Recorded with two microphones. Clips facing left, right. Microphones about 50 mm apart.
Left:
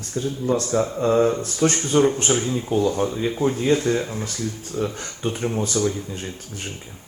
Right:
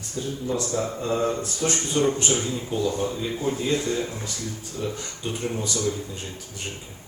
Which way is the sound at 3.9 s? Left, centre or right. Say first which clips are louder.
Left 5 dB; left.